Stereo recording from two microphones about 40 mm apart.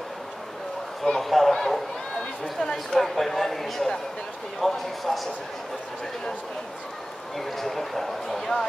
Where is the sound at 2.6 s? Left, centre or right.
Centre.